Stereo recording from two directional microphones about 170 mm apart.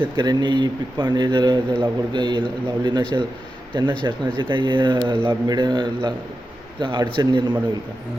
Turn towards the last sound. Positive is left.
turn(degrees=-30)  # may be behind; listen again after turning